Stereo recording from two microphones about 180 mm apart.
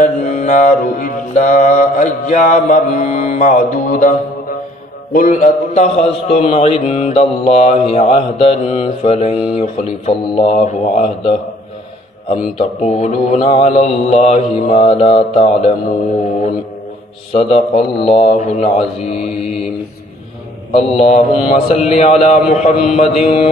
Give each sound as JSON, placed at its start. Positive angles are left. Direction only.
{"t": 0.0, "sound": "mantra", "side_deg": 45}
{"t": 12.5, "sound": "mantra", "side_deg": 40}
{"t": 17.3, "sound": "mantra", "side_deg": 30}
{"t": 20.7, "sound": "mantra", "side_deg": 35}